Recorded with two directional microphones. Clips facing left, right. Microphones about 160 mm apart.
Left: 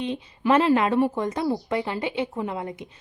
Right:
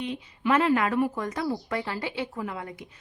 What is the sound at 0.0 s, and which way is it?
A woman's voice, 30° left (ahead or behind).